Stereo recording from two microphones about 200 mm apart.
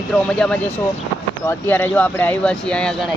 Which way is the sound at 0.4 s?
Centre (ahead or behind).